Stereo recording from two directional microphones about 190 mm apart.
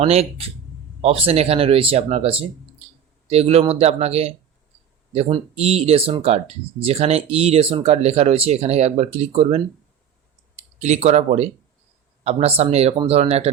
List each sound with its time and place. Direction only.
0.0 s speech: 30° right (ahead or behind)
10.8 s speech: 35° right (ahead or behind)